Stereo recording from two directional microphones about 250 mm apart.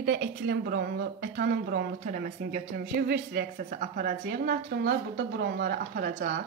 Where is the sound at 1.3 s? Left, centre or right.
Right.